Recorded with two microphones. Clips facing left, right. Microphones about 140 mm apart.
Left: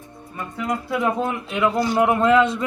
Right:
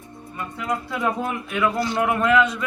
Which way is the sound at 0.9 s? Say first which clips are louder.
Left 5 dB; 20° left (ahead or behind).